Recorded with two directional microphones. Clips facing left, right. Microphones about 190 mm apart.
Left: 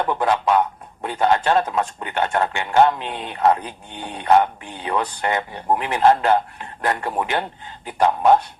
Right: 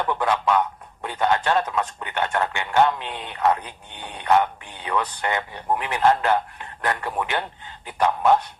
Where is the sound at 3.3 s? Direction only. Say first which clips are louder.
Left 3 dB; 30° left (ahead or behind).